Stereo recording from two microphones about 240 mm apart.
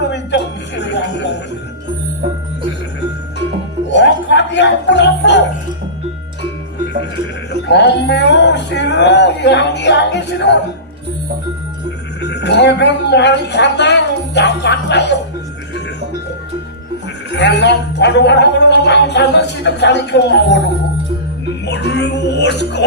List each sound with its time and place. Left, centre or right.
0.1 s music: left
3.8 s music: left
7.7 s speech: left
12.2 s speech: left
17.3 s speech: left
21.7 s speech: left